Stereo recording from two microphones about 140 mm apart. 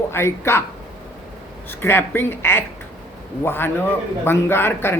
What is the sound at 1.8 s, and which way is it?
Speech, 15° left (ahead or behind).